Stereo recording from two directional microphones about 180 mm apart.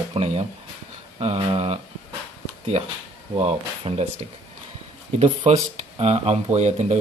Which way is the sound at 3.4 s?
35° right (ahead or behind).